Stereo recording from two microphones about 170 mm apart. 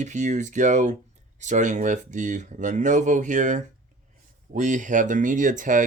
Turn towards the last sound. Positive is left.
turn(degrees=-50)  # may be behind; listen again after turning